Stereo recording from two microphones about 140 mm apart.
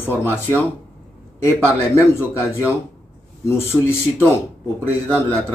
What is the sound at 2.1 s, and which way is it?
A man's voice, 20° left (ahead or behind).